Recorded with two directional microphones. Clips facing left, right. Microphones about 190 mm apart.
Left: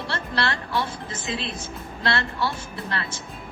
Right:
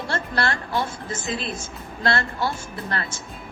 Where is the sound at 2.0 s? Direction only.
45° right (ahead or behind).